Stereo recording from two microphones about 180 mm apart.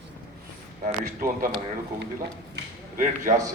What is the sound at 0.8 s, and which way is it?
Speech, 50° right (ahead or behind).